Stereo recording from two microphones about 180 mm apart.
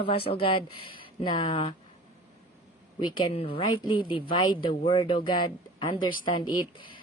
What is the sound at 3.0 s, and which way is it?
Speech, 25° left (ahead or behind).